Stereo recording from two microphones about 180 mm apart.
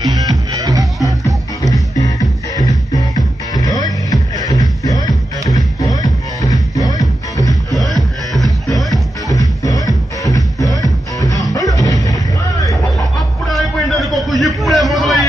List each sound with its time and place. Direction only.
0.0 s music: 20° right (ahead or behind)
1.6 s music: 20° left (ahead or behind)
7.7 s music: centre (ahead or behind)
9.3 s music: 20° left (ahead or behind)
13.5 s a sound: centre (ahead or behind)